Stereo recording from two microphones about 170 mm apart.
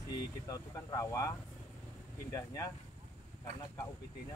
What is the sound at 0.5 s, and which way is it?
Speech, 20° left (ahead or behind).